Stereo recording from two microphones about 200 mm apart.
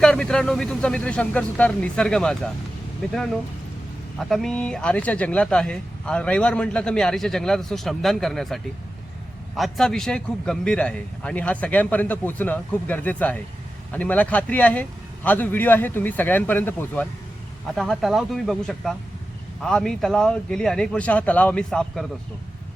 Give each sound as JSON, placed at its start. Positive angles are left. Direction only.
{"t": 0.0, "sound": "speech", "side_deg": 5}
{"t": 4.2, "sound": "speech", "side_deg": 0}